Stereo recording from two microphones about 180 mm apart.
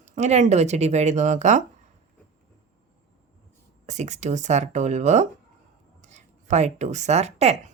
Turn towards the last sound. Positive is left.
turn(degrees=-35)  # may be behind; listen again after turning